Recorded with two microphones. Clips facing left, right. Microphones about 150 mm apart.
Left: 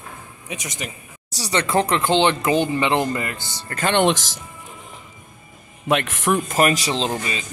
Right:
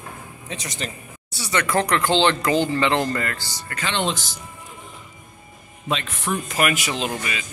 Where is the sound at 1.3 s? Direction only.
35° left (ahead or behind).